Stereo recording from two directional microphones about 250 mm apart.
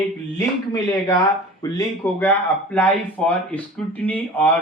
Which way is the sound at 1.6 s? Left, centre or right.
Centre.